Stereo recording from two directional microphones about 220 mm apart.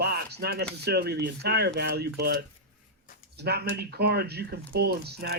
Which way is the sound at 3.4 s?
45° right (ahead or behind).